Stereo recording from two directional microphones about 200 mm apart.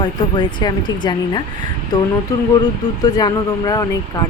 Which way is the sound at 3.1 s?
20° left (ahead or behind).